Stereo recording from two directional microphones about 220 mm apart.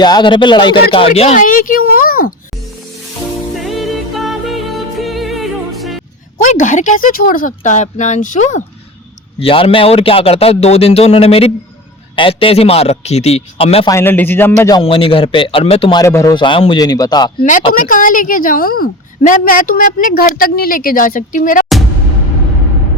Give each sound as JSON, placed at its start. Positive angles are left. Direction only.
{"t": 0.0, "sound": "a man's voice", "side_deg": 20}
{"t": 3.5, "sound": "music", "side_deg": 0}
{"t": 6.4, "sound": "a woman's voice", "side_deg": 35}
{"t": 13.9, "sound": "a man's voice", "side_deg": 10}
{"t": 17.7, "sound": "a woman's voice", "side_deg": 40}